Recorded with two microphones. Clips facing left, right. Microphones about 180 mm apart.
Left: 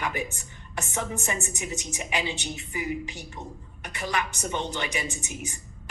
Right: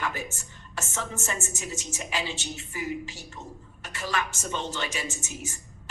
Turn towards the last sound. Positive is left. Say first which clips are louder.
# left 2 dB
turn(degrees=15)  # may be behind; listen again after turning